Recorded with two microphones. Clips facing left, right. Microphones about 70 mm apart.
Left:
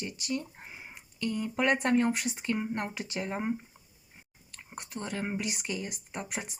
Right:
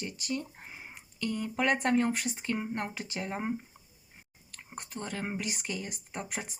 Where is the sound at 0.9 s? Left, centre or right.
Right.